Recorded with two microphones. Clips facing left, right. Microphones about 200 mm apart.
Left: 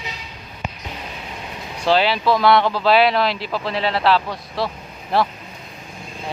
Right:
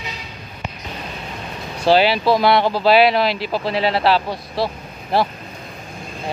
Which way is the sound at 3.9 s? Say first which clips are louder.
Right 1 dB; 30° right (ahead or behind).